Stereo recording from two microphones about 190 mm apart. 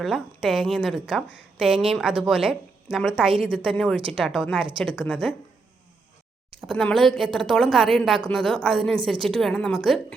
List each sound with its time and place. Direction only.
0.0 s a woman's voice: centre (ahead or behind)
6.6 s a woman's voice: 5° left (ahead or behind)